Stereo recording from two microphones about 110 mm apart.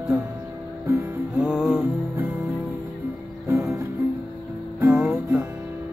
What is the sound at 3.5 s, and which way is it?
Music, 25° right (ahead or behind).